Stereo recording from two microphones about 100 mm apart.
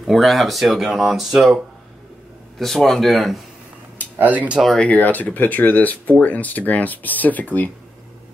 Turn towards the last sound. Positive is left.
turn(degrees=15)  # may be behind; listen again after turning